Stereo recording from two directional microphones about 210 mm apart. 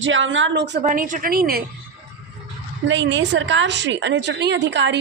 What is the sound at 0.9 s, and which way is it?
Speech, 40° right (ahead or behind).